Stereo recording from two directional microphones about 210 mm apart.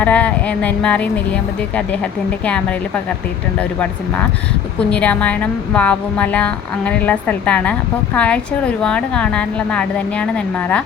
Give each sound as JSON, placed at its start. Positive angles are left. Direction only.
{"t": 0.0, "sound": "a woman's voice", "side_deg": 5}
{"t": 4.8, "sound": "a woman's voice", "side_deg": 5}